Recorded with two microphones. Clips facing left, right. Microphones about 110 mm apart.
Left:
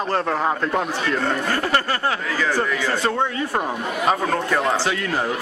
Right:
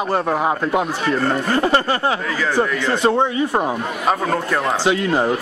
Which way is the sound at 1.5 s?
20° right (ahead or behind).